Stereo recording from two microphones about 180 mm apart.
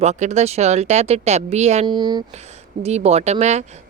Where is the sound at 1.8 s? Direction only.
25° right (ahead or behind).